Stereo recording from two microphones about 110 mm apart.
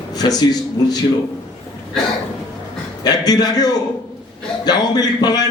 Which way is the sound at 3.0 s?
40° left (ahead or behind).